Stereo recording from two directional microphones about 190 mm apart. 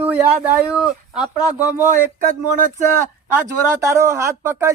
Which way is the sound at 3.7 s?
15° right (ahead or behind).